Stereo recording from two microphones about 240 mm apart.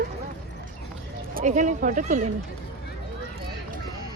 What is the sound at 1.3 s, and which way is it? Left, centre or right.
Speech, right.